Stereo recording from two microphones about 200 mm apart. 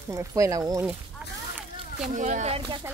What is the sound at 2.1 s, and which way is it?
Speech, 40° right (ahead or behind).